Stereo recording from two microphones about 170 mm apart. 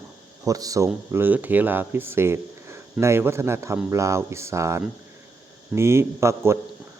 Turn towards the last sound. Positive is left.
turn(degrees=-15)  # may be behind; listen again after turning